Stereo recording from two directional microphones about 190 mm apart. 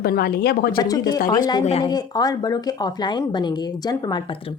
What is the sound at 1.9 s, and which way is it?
A woman's voice, 20° left (ahead or behind).